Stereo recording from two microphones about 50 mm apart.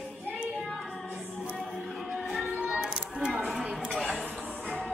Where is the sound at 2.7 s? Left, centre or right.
Right.